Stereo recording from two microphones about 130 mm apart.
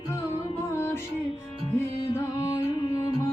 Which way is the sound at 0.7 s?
20° left (ahead or behind).